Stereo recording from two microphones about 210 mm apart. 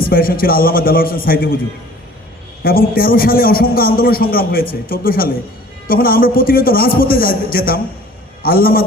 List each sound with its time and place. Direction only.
0.0 s a man's voice: 45° left (ahead or behind)
2.6 s a man's voice: 45° left (ahead or behind)